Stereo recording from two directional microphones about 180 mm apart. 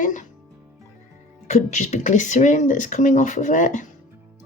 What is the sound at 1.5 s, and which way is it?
Speech, 40° left (ahead or behind).